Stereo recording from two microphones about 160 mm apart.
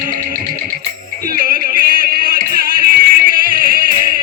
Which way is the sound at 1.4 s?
60° right (ahead or behind).